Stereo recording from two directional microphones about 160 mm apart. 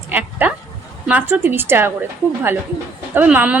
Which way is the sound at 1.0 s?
10° right (ahead or behind).